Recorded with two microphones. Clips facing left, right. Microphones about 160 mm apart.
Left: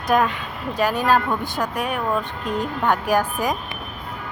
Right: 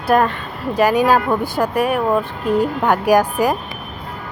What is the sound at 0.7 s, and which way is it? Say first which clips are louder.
Speech: right 5 dB; 10° right (ahead or behind).